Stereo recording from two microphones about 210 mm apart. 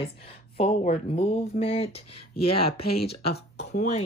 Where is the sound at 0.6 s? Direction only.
30° left (ahead or behind).